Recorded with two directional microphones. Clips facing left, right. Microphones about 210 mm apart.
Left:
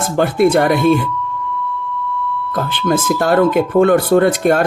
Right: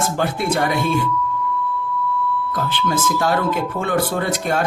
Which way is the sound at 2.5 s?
50° left (ahead or behind).